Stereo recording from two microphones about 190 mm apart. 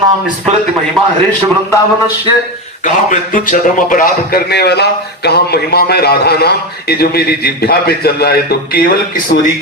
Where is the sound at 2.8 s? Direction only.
45° left (ahead or behind).